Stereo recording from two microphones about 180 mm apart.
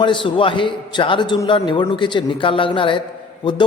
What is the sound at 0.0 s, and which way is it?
A man's voice, 25° left (ahead or behind).